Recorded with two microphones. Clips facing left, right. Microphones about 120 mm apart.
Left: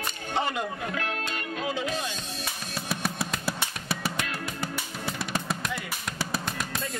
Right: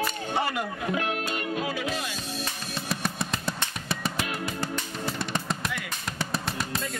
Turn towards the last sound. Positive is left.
turn(degrees=0)  # may be behind; listen again after turning